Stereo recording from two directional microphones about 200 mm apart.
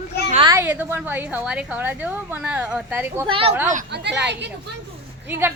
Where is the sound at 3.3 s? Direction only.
30° right (ahead or behind).